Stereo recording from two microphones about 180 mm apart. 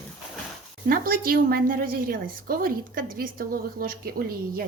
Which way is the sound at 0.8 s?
55° right (ahead or behind).